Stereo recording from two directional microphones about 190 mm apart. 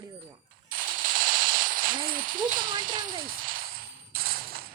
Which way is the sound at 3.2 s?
50° right (ahead or behind).